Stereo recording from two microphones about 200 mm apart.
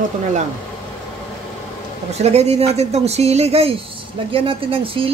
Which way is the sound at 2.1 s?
30° right (ahead or behind).